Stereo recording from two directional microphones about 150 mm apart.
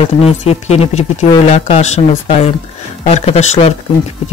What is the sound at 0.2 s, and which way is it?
A woman's voice, 45° left (ahead or behind).